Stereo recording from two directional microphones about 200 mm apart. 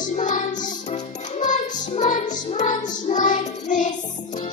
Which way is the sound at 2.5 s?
35° left (ahead or behind).